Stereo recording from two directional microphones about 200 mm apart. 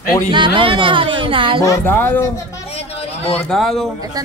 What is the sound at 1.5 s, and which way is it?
Speech, 15° left (ahead or behind).